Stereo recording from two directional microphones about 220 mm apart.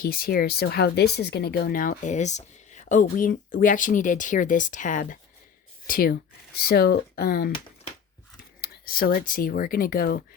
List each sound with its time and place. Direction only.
0.0 s speech: 40° left (ahead or behind)
8.6 s speech: 45° left (ahead or behind)